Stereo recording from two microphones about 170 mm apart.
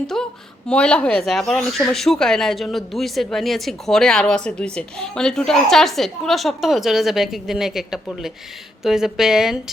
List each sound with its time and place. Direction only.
0.1 s speech: centre (ahead or behind)